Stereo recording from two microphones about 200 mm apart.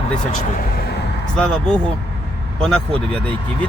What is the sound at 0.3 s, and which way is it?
Speech, 40° left (ahead or behind).